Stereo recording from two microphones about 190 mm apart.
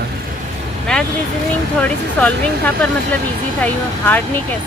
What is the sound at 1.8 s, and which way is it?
Speech, 5° left (ahead or behind).